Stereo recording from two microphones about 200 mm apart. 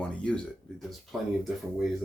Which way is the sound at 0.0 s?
5° left (ahead or behind).